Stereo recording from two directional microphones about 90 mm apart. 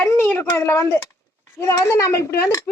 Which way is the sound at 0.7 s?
35° left (ahead or behind).